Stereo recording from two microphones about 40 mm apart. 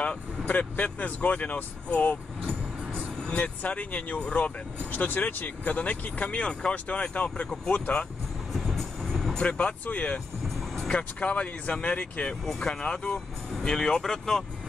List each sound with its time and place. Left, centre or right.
0.0 s speech: left
2.9 s vehicle: centre
3.3 s speech: left
4.9 s speech: left
8.5 s music: centre
9.4 s speech: left
12.4 s speech: centre